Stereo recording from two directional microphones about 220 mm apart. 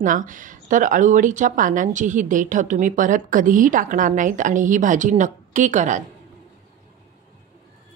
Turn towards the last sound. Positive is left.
turn(degrees=-35)  # may be behind; listen again after turning